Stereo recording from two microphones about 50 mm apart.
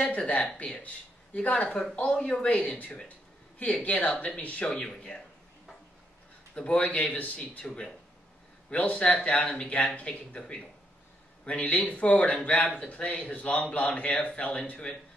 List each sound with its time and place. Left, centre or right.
0.1 s a man's voice: left
4.8 s a man's voice: centre
6.5 s a man's voice: left
7.6 s a man's voice: centre
8.7 s a man's voice: left
11.4 s a man's voice: left